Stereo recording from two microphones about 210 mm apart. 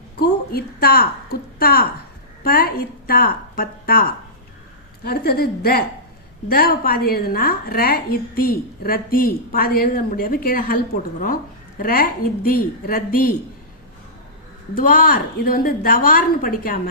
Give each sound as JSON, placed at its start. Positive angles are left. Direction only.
{"t": 0.2, "sound": "a woman's voice", "side_deg": 45}
{"t": 14.8, "sound": "a woman's voice", "side_deg": 40}